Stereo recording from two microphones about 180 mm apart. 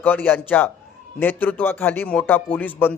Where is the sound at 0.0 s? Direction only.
10° left (ahead or behind).